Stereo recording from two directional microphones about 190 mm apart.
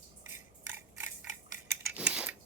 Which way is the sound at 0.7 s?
10° right (ahead or behind).